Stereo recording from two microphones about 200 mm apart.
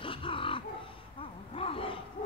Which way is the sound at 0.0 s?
25° left (ahead or behind).